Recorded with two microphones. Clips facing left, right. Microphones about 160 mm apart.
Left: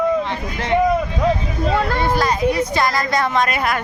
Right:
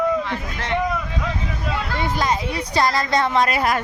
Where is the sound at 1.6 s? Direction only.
50° left (ahead or behind).